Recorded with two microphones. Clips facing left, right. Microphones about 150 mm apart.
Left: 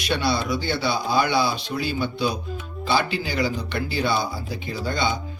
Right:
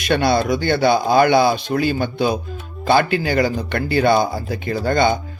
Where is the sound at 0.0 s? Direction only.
50° right (ahead or behind).